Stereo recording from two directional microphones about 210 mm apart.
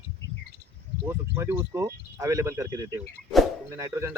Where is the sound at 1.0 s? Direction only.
15° right (ahead or behind).